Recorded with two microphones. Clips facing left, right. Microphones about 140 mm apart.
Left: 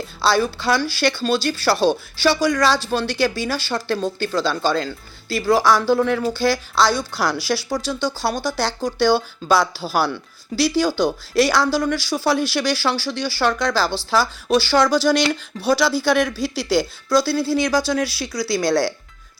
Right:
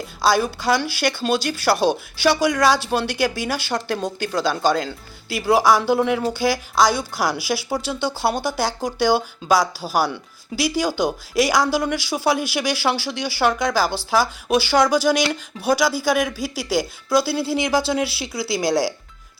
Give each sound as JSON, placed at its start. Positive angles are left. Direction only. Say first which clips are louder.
{"t": 0.2, "sound": "speech", "louder": "even", "side_deg": -15}
{"t": 15.0, "sound": "speech", "louder": "left 1 dB", "side_deg": -5}
{"t": 17.1, "sound": "speech", "louder": "left 1 dB", "side_deg": -20}